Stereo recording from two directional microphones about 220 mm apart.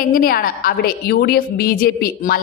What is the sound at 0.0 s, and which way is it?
A woman's voice, 40° left (ahead or behind).